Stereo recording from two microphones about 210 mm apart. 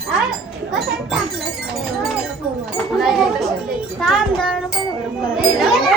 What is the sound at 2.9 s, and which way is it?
Speech, centre (ahead or behind).